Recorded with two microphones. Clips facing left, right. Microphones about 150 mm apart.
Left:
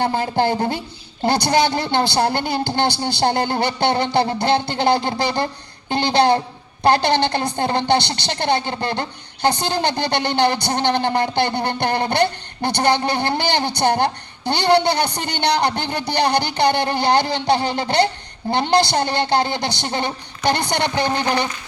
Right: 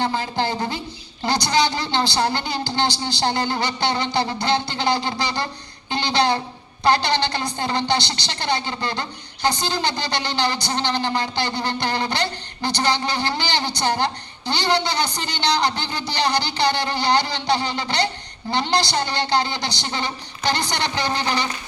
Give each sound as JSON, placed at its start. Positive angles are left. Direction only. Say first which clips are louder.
{"t": 0.0, "sound": "a man's voice", "louder": "left 4 dB", "side_deg": 50}